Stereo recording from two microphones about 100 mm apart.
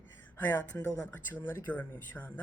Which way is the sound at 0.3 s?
20° left (ahead or behind).